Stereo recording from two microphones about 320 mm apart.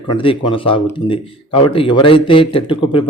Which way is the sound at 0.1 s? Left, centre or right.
Centre.